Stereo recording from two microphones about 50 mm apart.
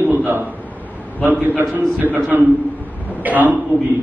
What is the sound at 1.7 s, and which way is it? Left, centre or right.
A man's voice, right.